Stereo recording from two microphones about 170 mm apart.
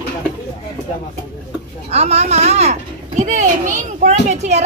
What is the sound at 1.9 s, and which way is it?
A child's voice, 40° right (ahead or behind).